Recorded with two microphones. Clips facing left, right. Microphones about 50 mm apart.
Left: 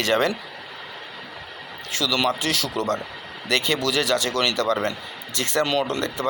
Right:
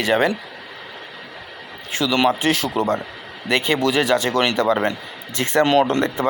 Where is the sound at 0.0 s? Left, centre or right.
Centre.